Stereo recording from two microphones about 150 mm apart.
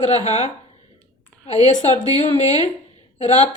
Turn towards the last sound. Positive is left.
turn(degrees=50)  # may be behind; listen again after turning